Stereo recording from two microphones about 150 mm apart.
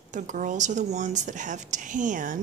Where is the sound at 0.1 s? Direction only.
60° right (ahead or behind).